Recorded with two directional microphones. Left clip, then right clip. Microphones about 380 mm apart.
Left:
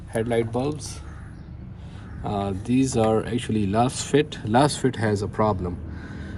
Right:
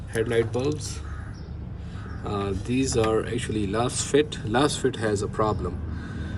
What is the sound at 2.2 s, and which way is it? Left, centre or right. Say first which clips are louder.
Speech: left 2 dB; centre.